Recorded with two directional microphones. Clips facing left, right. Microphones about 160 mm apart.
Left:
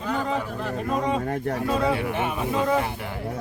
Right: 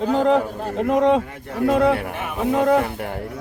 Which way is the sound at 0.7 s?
85° right.